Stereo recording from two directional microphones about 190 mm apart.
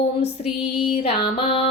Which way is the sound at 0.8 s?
30° left (ahead or behind).